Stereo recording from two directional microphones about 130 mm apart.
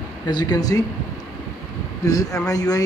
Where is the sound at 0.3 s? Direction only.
30° left (ahead or behind).